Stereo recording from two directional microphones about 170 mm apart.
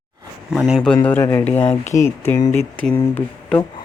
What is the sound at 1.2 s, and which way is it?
Speech, 10° left (ahead or behind).